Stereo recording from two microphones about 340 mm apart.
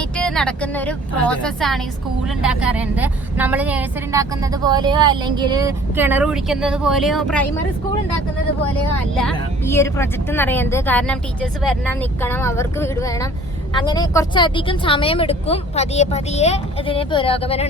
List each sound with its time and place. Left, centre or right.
0.0 s a woman's voice: centre
9.1 s speech: centre